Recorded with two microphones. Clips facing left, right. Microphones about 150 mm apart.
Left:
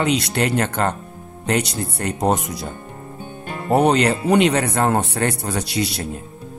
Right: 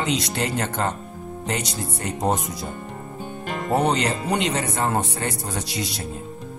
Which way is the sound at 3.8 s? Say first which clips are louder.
Left 6 dB; 65° left (ahead or behind).